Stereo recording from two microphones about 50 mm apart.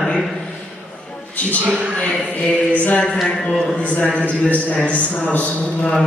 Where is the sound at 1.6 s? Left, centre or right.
Right.